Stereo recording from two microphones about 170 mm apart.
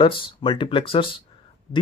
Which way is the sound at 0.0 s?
30° left (ahead or behind).